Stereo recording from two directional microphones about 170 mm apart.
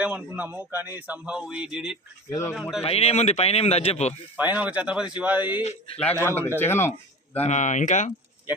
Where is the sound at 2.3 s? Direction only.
15° left (ahead or behind).